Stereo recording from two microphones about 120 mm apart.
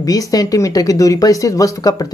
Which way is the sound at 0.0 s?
30° left (ahead or behind).